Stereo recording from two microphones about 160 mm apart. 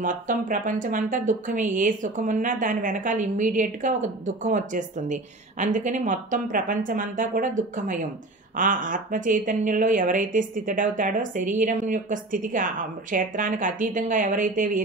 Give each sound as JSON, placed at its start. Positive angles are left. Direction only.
{"t": 0.0, "sound": "a woman's voice", "side_deg": -55}